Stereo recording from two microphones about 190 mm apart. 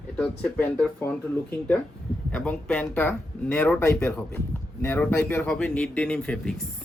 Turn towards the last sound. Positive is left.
turn(degrees=5)  # may be behind; listen again after turning